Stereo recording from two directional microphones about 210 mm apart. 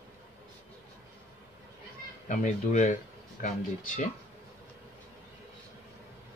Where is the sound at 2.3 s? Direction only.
35° left (ahead or behind).